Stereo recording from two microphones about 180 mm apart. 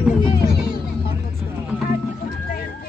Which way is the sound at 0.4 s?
60° left (ahead or behind).